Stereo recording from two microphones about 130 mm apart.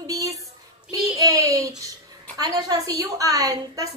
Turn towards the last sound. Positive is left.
turn(degrees=-25)  # may be behind; listen again after turning